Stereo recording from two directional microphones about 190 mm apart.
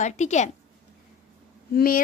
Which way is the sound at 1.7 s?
50° left (ahead or behind).